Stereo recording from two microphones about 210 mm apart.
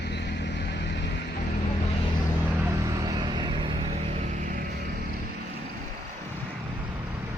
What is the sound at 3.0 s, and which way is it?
Vehicle, 20° right (ahead or behind).